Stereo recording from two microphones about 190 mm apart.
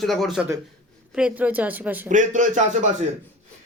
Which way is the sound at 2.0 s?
40° right (ahead or behind).